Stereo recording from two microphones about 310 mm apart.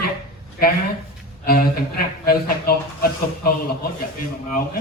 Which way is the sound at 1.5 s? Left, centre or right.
Left.